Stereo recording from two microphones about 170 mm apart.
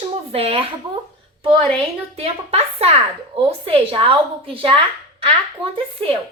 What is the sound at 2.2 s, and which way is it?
Speech, 35° right (ahead or behind).